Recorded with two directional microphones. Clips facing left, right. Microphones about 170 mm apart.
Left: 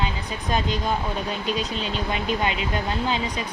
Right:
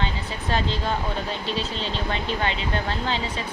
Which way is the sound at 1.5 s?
30° right (ahead or behind).